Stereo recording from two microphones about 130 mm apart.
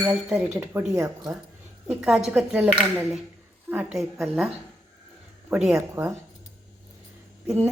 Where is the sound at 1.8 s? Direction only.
5° right (ahead or behind).